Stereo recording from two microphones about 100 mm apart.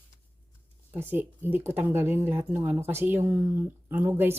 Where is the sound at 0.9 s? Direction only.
20° right (ahead or behind).